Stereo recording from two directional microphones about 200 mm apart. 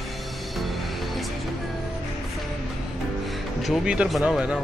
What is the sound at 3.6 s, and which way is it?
Speech, 5° right (ahead or behind).